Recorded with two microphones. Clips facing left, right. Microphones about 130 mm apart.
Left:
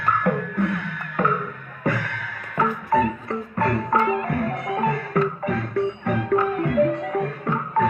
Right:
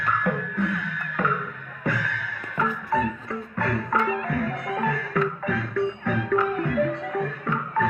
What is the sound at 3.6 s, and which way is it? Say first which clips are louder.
Music: left 4 dB; 40° left (ahead or behind).